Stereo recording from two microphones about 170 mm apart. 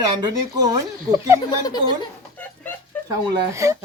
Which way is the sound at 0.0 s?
25° right (ahead or behind).